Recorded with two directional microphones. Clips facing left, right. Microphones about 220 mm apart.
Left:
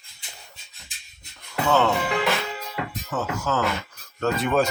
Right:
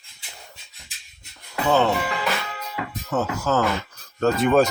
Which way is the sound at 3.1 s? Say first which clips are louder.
Right 5 dB; 40° right (ahead or behind).